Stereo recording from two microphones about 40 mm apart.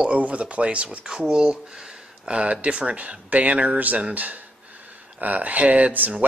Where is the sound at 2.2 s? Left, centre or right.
Right.